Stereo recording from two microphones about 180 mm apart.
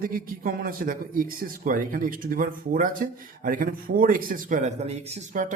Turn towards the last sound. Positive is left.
turn(degrees=-45)  # may be behind; listen again after turning